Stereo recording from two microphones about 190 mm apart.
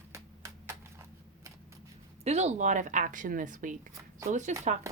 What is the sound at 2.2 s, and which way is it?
Speech, 35° right (ahead or behind).